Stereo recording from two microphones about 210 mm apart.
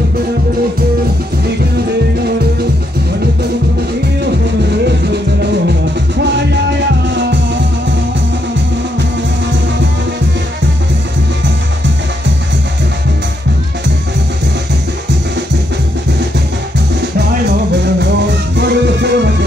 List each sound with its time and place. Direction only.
4.8 s music: 50° right (ahead or behind)
7.2 s music: 60° right (ahead or behind)
18.6 s music: 55° right (ahead or behind)